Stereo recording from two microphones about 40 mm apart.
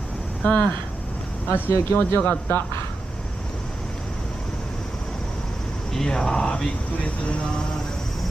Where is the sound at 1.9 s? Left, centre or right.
Left.